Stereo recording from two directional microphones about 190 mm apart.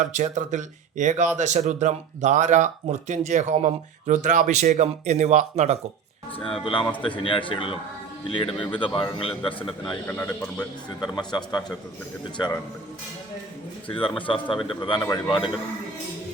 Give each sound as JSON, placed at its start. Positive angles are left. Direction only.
{"t": 0.0, "sound": "speech", "side_deg": -40}
{"t": 6.4, "sound": "speech", "side_deg": 30}
{"t": 9.6, "sound": "speech", "side_deg": 5}
{"t": 11.1, "sound": "speech", "side_deg": 20}
{"t": 13.8, "sound": "speech", "side_deg": 25}